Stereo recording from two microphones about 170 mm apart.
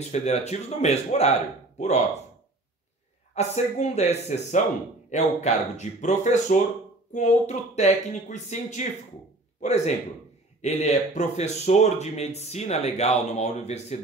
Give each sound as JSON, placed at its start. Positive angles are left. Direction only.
{"t": 0.1, "sound": "speech", "side_deg": 40}
{"t": 3.3, "sound": "a man's voice", "side_deg": 40}